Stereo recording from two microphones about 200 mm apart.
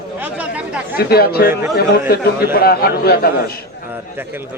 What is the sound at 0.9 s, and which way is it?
A man's voice, 50° left (ahead or behind).